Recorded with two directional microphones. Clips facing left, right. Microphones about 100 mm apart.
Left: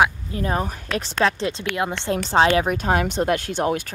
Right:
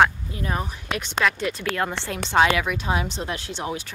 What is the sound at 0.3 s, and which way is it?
Speech, 35° left (ahead or behind).